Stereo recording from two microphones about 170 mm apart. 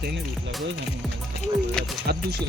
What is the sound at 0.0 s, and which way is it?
Music, 85° right.